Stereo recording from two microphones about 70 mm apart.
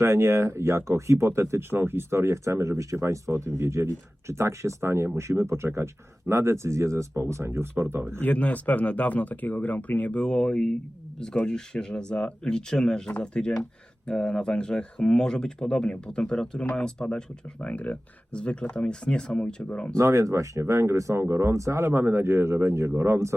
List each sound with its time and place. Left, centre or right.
0.0 s speech: right
8.2 s speech: centre
20.0 s speech: right
21.8 s speech: right